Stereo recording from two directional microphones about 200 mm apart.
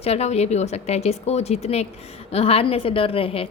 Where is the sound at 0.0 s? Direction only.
30° left (ahead or behind).